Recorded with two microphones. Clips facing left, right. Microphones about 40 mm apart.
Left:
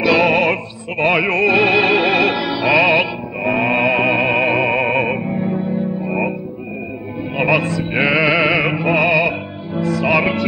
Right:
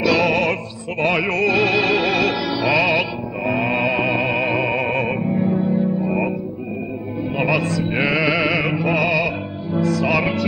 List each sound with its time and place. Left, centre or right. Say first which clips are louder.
0.0 s music: left 3 dB; left
7.3 s music: left 4 dB; left